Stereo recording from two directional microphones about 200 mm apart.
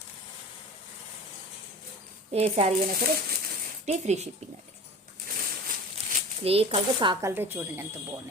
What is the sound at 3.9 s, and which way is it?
Speech, 35° right (ahead or behind).